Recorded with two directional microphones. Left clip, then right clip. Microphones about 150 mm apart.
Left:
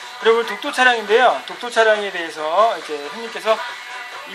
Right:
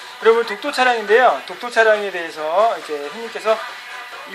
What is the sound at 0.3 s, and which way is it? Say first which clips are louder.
Speech: right 1 dB; 25° right (ahead or behind).